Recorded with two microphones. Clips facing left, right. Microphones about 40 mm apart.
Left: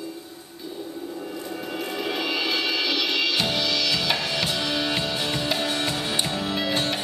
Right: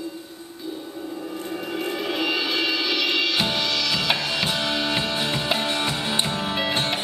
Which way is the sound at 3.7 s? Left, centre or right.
Centre.